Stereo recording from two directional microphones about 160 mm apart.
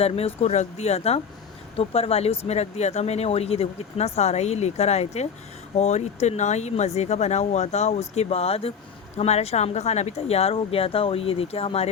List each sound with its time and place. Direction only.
0.0 s speech: 40° left (ahead or behind)